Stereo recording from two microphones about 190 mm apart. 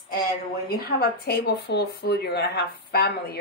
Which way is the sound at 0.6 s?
55° left (ahead or behind).